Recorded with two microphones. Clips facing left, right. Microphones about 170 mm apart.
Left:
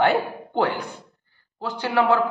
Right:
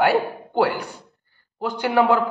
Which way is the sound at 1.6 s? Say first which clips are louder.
Right 3 dB; 15° right (ahead or behind).